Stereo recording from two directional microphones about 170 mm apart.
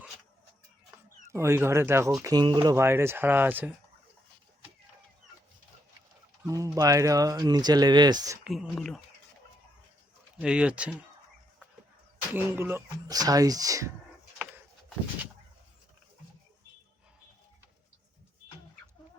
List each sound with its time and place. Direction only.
1.3 s speech: 15° right (ahead or behind)
2.2 s speech: 25° right (ahead or behind)
2.7 s speech: 15° right (ahead or behind)
6.4 s speech: 20° right (ahead or behind)
8.4 s speech: centre (ahead or behind)
10.4 s speech: 5° right (ahead or behind)
12.3 s speech: 10° right (ahead or behind)